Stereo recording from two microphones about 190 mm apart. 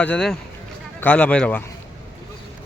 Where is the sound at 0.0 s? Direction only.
5° left (ahead or behind).